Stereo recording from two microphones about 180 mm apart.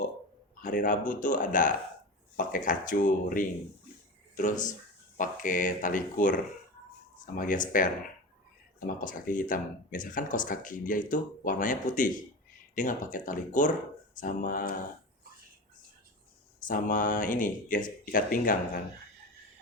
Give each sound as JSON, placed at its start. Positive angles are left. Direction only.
{"t": 0.6, "sound": "speech", "side_deg": 45}
{"t": 9.0, "sound": "speech", "side_deg": 50}
{"t": 16.6, "sound": "speech", "side_deg": 45}